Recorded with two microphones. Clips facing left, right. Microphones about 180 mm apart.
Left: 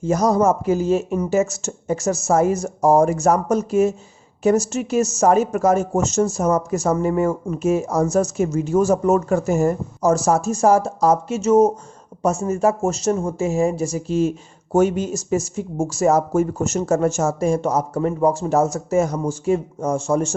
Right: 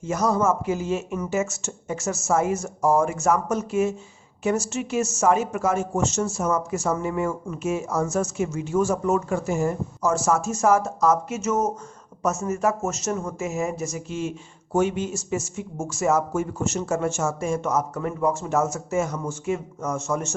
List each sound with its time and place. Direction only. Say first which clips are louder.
0.0 s speech: left 5 dB; 35° left (ahead or behind)